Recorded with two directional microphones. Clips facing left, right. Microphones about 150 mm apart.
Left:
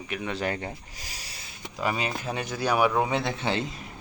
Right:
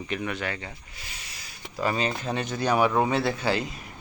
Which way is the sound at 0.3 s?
40° left (ahead or behind).